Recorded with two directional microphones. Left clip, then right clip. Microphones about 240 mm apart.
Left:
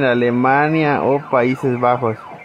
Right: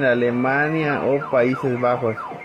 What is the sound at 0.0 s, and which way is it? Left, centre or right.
Speech, left.